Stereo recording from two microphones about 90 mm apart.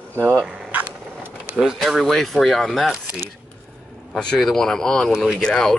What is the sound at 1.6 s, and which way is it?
Speech, centre (ahead or behind).